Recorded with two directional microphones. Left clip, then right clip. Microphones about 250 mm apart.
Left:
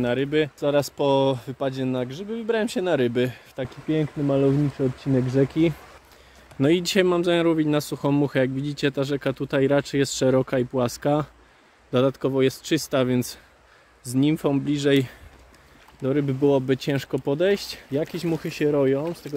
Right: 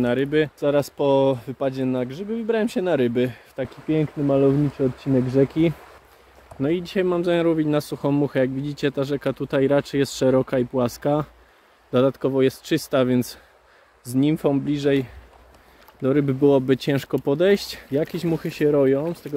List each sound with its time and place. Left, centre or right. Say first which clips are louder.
0.0 s speech: right 2 dB; centre
6.6 s speech: left 3 dB; left
7.1 s speech: right 4 dB; centre
16.0 s speech: right 3 dB; centre